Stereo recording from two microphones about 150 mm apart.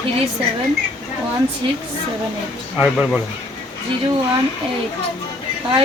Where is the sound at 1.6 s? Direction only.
35° right (ahead or behind).